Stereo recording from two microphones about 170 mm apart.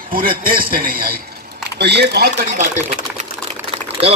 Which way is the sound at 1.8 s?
85° right.